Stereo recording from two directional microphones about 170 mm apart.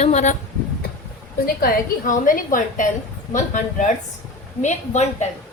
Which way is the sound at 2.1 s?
55° left (ahead or behind).